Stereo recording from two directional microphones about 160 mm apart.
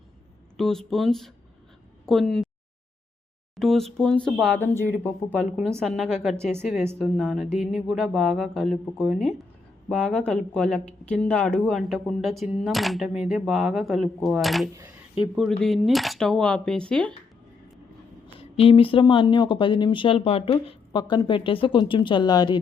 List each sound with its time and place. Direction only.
0.5 s speech: 5° left (ahead or behind)
3.5 s speech: centre (ahead or behind)
18.3 s speech: 35° left (ahead or behind)